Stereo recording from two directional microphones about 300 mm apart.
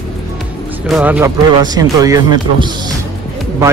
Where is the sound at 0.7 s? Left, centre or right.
Centre.